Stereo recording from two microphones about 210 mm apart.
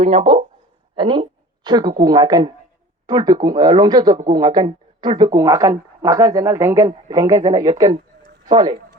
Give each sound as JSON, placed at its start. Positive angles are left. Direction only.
{"t": 0.0, "sound": "speech", "side_deg": -30}